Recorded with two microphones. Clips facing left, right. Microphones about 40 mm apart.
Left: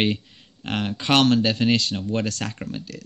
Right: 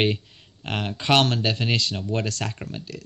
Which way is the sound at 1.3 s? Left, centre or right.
Right.